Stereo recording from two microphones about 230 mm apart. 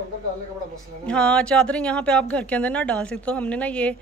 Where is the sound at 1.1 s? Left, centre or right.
Centre.